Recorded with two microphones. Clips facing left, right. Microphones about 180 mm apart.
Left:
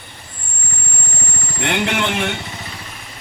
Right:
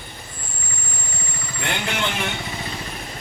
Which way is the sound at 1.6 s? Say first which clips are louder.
Left 6 dB; 70° left (ahead or behind).